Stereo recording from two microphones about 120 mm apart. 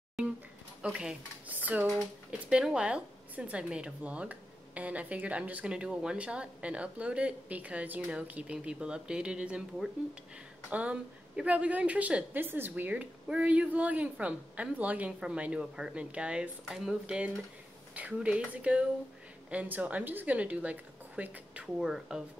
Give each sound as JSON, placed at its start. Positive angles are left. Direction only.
{"t": 0.8, "sound": "a woman's voice", "side_deg": -10}